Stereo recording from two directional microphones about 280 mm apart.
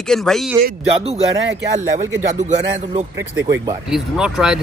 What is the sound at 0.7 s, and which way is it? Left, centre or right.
Speech, right.